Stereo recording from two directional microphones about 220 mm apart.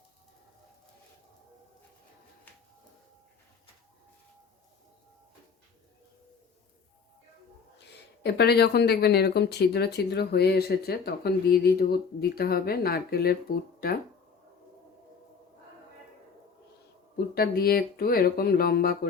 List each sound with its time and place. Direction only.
8.2 s speech: 45° left (ahead or behind)
17.2 s speech: 45° left (ahead or behind)